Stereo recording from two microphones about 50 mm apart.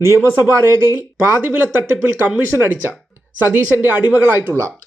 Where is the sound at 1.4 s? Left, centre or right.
Right.